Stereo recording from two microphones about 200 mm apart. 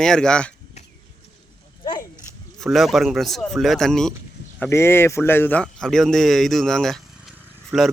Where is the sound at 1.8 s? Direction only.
20° left (ahead or behind).